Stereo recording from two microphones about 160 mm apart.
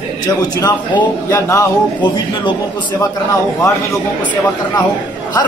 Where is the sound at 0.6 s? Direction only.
25° left (ahead or behind).